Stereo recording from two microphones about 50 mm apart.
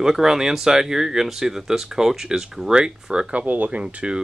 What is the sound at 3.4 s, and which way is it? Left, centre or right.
Speech, right.